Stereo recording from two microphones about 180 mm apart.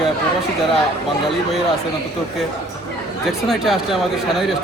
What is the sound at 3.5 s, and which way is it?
Speech, centre (ahead or behind).